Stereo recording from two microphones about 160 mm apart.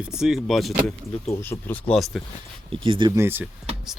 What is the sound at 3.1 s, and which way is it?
Speech, 15° right (ahead or behind).